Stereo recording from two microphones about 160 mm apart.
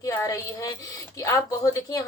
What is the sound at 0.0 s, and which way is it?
Speech, 20° left (ahead or behind).